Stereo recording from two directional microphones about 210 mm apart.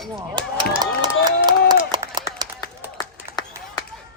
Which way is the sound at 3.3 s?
30° right (ahead or behind).